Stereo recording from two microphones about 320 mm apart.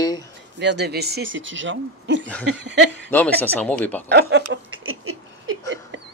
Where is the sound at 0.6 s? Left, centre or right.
Right.